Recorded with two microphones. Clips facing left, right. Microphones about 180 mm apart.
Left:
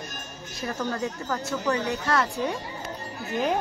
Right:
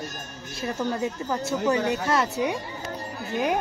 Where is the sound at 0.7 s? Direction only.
25° right (ahead or behind).